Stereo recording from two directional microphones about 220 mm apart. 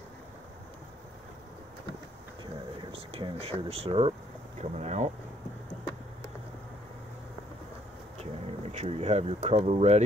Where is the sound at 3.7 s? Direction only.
25° right (ahead or behind).